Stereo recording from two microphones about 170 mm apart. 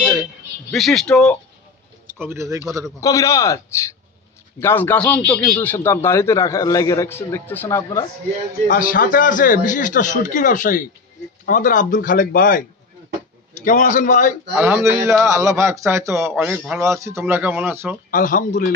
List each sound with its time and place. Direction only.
0.7 s speech: centre (ahead or behind)
2.1 s a man's voice: 15° right (ahead or behind)
3.0 s speech: 20° left (ahead or behind)
8.6 s speech: 55° left (ahead or behind)
14.5 s a man's voice: 10° right (ahead or behind)
18.1 s speech: 50° left (ahead or behind)